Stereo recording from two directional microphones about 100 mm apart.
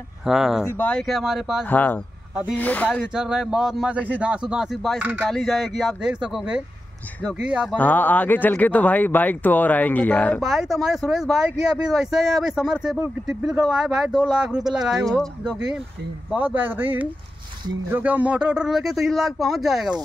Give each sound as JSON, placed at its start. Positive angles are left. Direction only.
{"t": 0.2, "sound": "speech", "side_deg": -5}
{"t": 0.7, "sound": "speech", "side_deg": 15}
{"t": 0.9, "sound": "speech", "side_deg": 0}
{"t": 1.7, "sound": "speech", "side_deg": 20}
{"t": 3.2, "sound": "speech", "side_deg": -10}
{"t": 5.3, "sound": "speech", "side_deg": 0}
{"t": 7.7, "sound": "speech", "side_deg": 15}
{"t": 10.4, "sound": "speech", "side_deg": 0}